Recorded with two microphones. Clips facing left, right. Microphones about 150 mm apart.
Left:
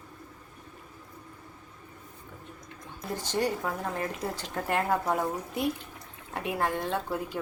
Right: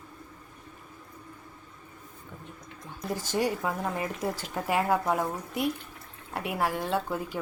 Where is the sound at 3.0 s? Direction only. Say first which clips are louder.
Right 1 dB; 10° right (ahead or behind).